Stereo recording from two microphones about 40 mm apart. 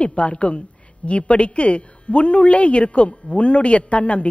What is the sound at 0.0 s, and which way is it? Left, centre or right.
A woman's voice, left.